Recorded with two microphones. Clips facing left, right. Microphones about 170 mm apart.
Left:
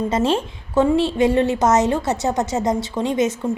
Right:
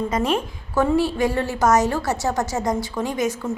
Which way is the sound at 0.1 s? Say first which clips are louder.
Left 3 dB; 30° left (ahead or behind).